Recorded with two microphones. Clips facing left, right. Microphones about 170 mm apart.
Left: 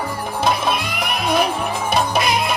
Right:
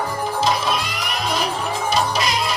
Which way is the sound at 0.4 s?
55° left (ahead or behind).